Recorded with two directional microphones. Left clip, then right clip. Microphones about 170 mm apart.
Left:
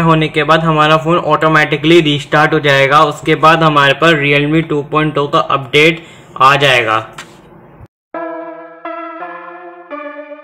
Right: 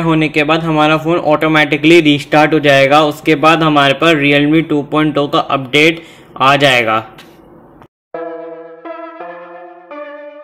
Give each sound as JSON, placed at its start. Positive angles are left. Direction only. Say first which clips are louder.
{"t": 0.1, "sound": "a man's voice", "louder": "left 1 dB", "side_deg": -35}